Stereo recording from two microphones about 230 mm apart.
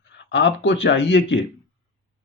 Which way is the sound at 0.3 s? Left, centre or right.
Left.